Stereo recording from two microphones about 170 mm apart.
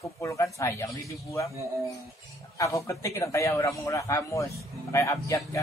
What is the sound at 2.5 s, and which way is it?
A man's voice, 20° left (ahead or behind).